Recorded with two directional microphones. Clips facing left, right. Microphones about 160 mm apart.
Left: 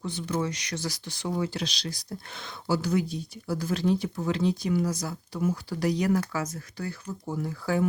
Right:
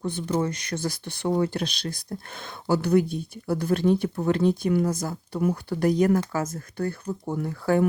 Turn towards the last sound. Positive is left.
turn(degrees=-55)  # may be behind; listen again after turning